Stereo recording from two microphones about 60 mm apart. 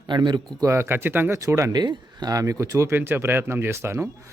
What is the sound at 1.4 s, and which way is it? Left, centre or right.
Speech, right.